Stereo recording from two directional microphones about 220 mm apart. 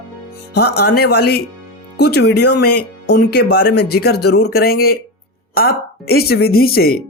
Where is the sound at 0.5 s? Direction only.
50° left (ahead or behind).